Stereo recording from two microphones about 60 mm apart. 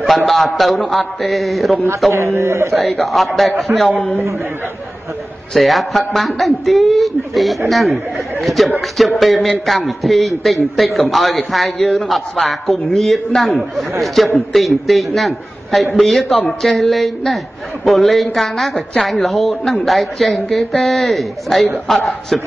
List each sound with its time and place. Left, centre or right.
0.3 s a man's voice: centre
2.1 s a man's voice: right
2.7 s a man's voice: centre
3.9 s a man's voice: centre
5.5 s a man's voice: centre